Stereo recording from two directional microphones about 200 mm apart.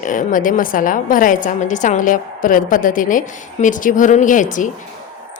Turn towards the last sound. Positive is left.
turn(degrees=40)  # may be behind; listen again after turning